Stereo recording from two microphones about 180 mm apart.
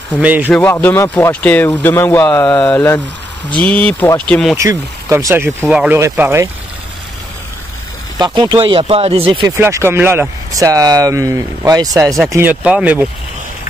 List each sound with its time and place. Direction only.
0.2 s speech: 10° right (ahead or behind)
0.5 s speech: 5° left (ahead or behind)
4.6 s speech: 15° right (ahead or behind)
8.2 s speech: 25° right (ahead or behind)
9.6 s speech: 15° right (ahead or behind)